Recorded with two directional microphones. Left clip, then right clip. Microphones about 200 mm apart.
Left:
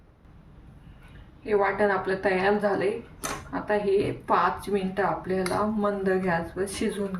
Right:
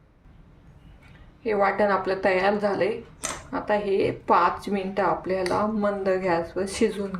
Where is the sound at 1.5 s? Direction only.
40° right (ahead or behind).